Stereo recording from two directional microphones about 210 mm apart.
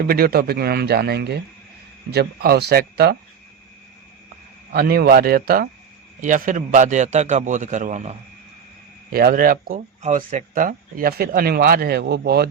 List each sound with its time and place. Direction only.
0.0 s speech: 45° right (ahead or behind)
4.7 s a man's voice: 45° right (ahead or behind)